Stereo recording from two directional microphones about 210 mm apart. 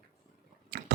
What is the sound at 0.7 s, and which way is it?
Tick-tock, 50° right (ahead or behind).